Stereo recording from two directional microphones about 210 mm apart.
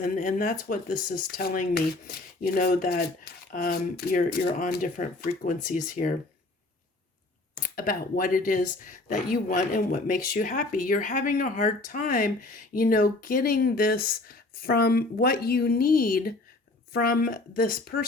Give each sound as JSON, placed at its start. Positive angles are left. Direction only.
{"t": 0.0, "sound": "speech", "side_deg": 40}
{"t": 7.6, "sound": "speech", "side_deg": 40}